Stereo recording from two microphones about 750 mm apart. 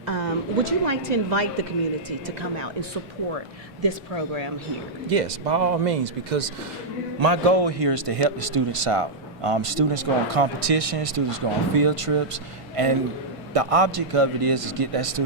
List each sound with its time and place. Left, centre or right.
0.0 s a woman's voice: right
3.8 s a man's voice: right
5.0 s speech: right
7.2 s a man's voice: right